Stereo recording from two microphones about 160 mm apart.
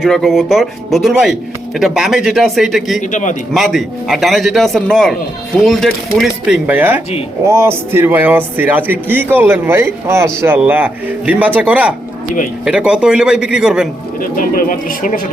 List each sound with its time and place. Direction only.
0.0 s a man's voice: centre (ahead or behind)
3.0 s a man's voice: 50° left (ahead or behind)
3.5 s a man's voice: centre (ahead or behind)
14.2 s speech: 65° left (ahead or behind)